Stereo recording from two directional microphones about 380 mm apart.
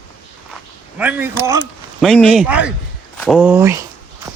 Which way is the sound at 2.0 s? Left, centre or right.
Centre.